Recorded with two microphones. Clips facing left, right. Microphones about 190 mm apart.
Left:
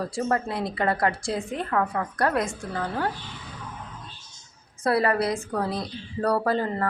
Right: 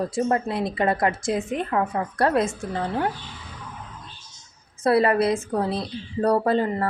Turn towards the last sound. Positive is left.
turn(degrees=-20)  # may be behind; listen again after turning